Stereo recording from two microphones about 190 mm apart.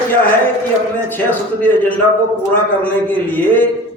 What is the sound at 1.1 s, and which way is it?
Speech, 10° left (ahead or behind).